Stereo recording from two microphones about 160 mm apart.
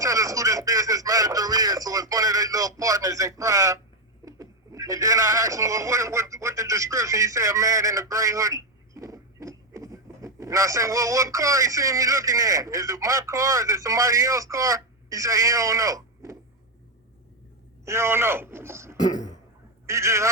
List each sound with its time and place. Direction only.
0.0 s a sound: 20° right (ahead or behind)
4.3 s speech: 20° right (ahead or behind)
17.8 s a man's voice: 15° right (ahead or behind)
18.9 s speech: 25° left (ahead or behind)
19.9 s a man's voice: 20° right (ahead or behind)